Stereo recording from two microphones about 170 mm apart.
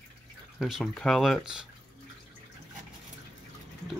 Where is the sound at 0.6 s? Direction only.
Centre (ahead or behind).